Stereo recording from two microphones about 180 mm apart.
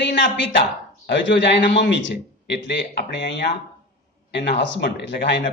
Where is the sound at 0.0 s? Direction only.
75° left (ahead or behind).